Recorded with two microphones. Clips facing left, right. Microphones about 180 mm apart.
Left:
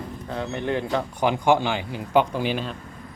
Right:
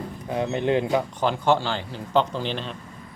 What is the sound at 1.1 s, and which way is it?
Speech, 15° left (ahead or behind).